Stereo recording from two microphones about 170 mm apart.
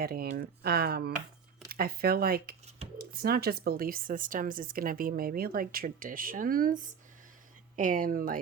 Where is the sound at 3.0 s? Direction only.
65° right (ahead or behind).